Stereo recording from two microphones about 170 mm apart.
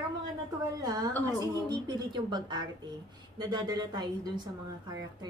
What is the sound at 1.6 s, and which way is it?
Speech, 25° right (ahead or behind).